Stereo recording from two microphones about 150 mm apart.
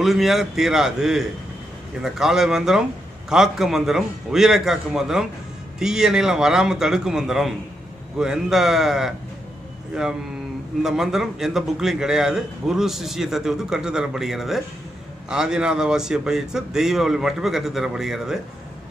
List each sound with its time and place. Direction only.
0.0 s a man's voice: centre (ahead or behind)
10.8 s a man's voice: 5° right (ahead or behind)